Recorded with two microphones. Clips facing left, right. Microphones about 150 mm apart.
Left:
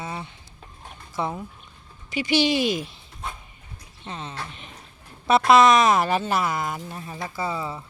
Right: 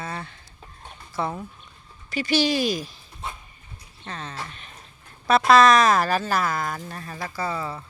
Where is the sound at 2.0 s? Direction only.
20° left (ahead or behind).